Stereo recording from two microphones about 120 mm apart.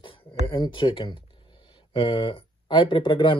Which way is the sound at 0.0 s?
45° left (ahead or behind).